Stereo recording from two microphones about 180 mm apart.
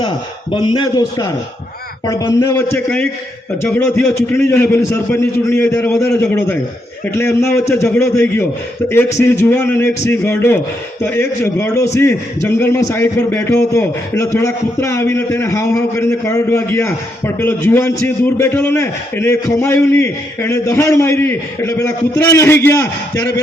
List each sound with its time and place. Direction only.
0.5 s a man's voice: 25° left (ahead or behind)